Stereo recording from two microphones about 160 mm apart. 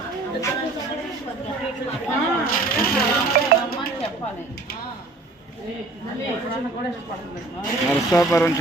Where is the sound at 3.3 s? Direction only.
70° right (ahead or behind).